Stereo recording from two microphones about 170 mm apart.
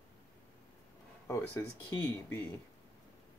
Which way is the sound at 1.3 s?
15° left (ahead or behind).